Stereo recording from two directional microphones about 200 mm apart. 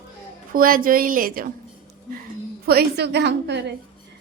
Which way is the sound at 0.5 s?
45° right (ahead or behind).